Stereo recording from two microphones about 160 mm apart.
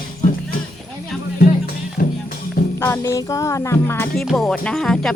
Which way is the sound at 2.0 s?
70° left (ahead or behind).